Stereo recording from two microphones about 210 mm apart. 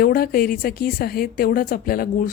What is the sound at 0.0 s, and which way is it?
A woman's voice, 45° left (ahead or behind).